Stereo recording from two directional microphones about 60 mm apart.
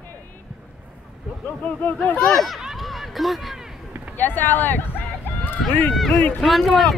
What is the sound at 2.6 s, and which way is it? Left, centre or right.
Run, centre.